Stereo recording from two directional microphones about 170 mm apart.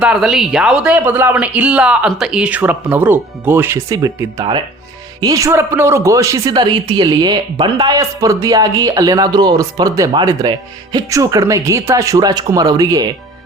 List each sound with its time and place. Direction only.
0.0 s speech: 5° right (ahead or behind); by 13.1 s 20° right (ahead or behind)